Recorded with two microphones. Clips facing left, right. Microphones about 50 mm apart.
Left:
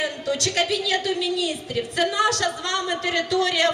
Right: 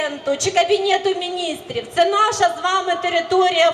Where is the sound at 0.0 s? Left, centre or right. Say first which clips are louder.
Right 4 dB; right.